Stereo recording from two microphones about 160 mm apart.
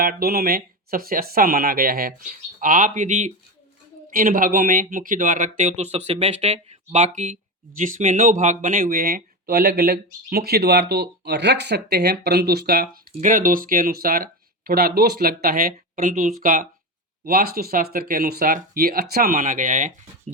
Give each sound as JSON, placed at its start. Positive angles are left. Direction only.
{"t": 0.0, "sound": "speech", "side_deg": -65}
{"t": 2.6, "sound": "speech", "side_deg": -55}
{"t": 4.1, "sound": "speech", "side_deg": -60}
{"t": 13.1, "sound": "speech", "side_deg": -60}
{"t": 17.2, "sound": "speech", "side_deg": -65}